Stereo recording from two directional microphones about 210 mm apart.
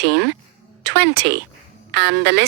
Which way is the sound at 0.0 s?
55° right (ahead or behind).